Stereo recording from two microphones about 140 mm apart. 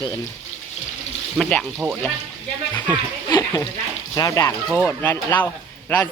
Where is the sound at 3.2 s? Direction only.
30° left (ahead or behind).